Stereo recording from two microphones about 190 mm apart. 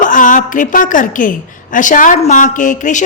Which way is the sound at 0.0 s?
45° left (ahead or behind).